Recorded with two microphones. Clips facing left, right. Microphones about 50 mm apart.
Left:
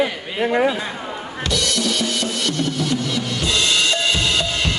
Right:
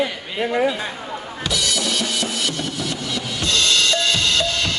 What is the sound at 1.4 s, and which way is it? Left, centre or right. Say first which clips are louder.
Drum kit: left 2 dB; centre.